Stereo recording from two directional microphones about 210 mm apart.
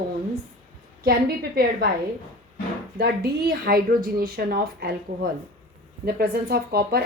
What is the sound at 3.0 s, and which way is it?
Speech, 50° right (ahead or behind).